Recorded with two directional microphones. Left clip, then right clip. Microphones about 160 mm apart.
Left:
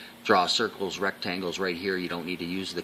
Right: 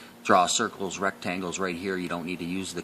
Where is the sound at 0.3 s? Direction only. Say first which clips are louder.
Right 1 dB; 50° right (ahead or behind).